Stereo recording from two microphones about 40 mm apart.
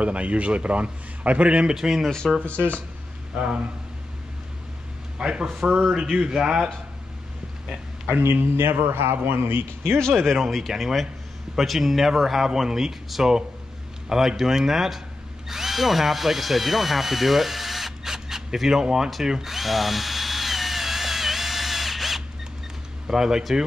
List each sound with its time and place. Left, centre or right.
0.0 s a man's voice: right
1.7 s speech: centre
2.0 s speech: centre
3.3 s a man's voice: right
5.2 s a man's voice: right
8.9 s a man's voice: right
9.9 s speech: centre
19.2 s drill: centre
23.0 s speech: centre